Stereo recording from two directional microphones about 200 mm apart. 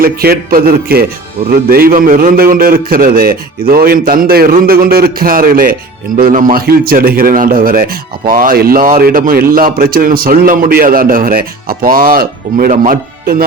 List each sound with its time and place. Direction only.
0.0 s a man's voice: 50° right (ahead or behind)